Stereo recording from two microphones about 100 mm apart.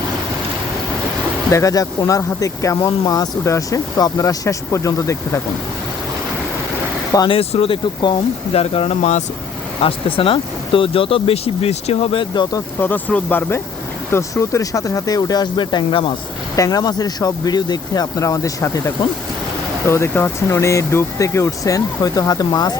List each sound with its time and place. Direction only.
1.5 s speech: 35° left (ahead or behind)
7.3 s speech: 75° left (ahead or behind)
9.8 s speech: 65° left (ahead or behind); by 12.2 s 90° left
12.2 s speech: 50° left (ahead or behind)
12.8 s speech: 15° left (ahead or behind)
14.1 s speech: 30° left (ahead or behind); by 16.1 s 55° left (ahead or behind)
16.6 s speech: 40° left (ahead or behind)
19.9 s speech: 25° left (ahead or behind); by 22.8 s 40° left (ahead or behind)